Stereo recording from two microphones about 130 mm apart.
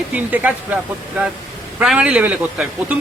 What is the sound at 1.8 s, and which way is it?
A man's voice, 5° right (ahead or behind).